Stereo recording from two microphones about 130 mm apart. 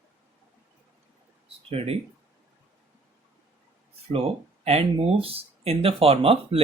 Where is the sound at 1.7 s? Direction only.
50° right (ahead or behind).